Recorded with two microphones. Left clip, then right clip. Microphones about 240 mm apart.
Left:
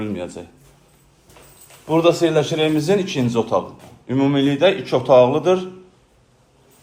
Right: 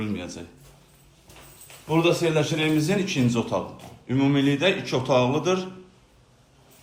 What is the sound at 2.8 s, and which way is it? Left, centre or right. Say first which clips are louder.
A man's voice: left 6 dB; left.